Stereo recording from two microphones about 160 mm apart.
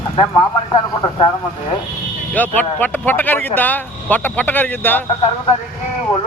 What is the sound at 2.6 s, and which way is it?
Speech, 10° left (ahead or behind).